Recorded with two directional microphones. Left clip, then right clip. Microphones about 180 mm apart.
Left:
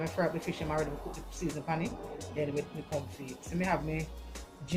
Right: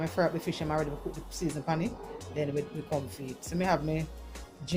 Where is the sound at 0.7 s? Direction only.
Centre (ahead or behind).